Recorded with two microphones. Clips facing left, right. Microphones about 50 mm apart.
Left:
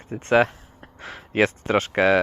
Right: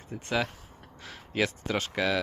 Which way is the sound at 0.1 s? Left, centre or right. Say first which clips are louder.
Left 11 dB; left.